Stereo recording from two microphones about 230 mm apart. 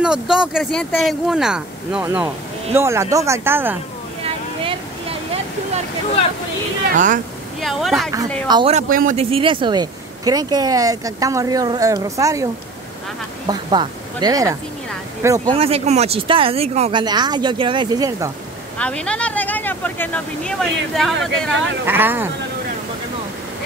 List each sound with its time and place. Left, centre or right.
0.0 s speech: centre
4.2 s a sound: right
6.9 s speech: right
7.6 s speech: centre
8.5 s speech: centre
8.7 s speech: right; by 12.4 s centre
13.5 s speech: centre
18.8 s speech: centre
21.8 s speech: centre